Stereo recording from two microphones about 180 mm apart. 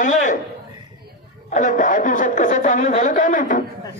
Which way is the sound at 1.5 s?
45° left (ahead or behind).